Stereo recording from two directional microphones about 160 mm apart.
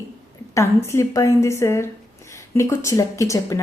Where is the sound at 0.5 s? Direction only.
15° left (ahead or behind).